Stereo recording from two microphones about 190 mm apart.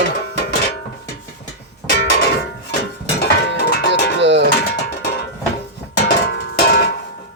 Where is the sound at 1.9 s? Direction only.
60° left (ahead or behind).